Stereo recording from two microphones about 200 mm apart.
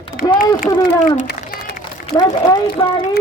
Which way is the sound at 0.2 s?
45° left (ahead or behind).